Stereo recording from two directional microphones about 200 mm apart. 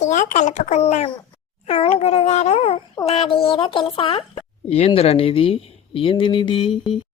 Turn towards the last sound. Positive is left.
turn(degrees=25)  # may be behind; listen again after turning